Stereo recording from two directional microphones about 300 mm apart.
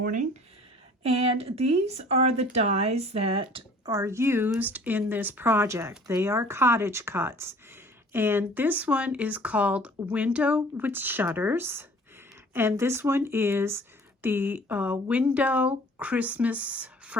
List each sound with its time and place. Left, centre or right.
0.0 s speech: right; by 17.2 s centre